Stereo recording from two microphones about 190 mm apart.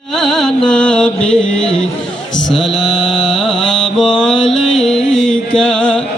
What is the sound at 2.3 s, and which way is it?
Mantra, centre (ahead or behind).